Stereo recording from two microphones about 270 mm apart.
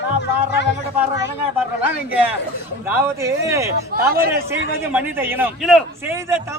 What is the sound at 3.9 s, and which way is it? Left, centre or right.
Speech, right.